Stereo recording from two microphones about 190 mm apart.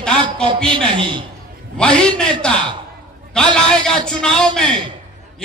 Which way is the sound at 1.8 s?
5° left (ahead or behind).